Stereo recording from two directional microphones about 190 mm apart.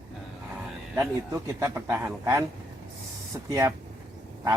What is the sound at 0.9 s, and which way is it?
Speech, 10° right (ahead or behind).